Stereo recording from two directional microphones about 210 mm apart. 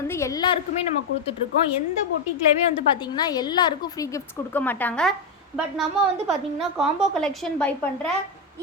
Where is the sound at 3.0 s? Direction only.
20° left (ahead or behind).